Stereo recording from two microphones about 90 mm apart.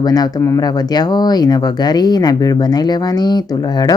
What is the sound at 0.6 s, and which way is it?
Speech, 50° left (ahead or behind).